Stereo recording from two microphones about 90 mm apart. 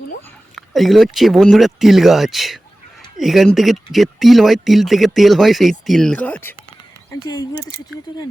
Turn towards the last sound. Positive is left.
turn(degrees=45)  # may be behind; listen again after turning